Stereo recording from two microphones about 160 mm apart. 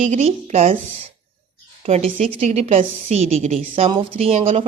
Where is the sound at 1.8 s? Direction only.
40° right (ahead or behind).